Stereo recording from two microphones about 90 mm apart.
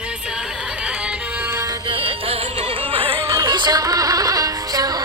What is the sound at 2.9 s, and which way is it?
Music, 90° right.